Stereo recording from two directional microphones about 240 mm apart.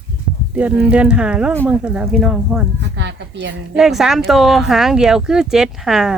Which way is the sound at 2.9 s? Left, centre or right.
Right.